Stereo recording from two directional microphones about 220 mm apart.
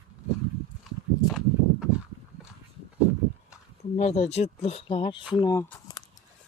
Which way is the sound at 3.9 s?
30° left (ahead or behind).